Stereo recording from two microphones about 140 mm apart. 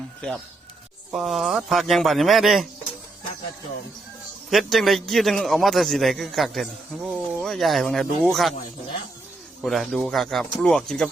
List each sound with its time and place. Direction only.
1.1 s a man's voice: centre (ahead or behind)
4.4 s a man's voice: centre (ahead or behind)
9.6 s a man's voice: centre (ahead or behind)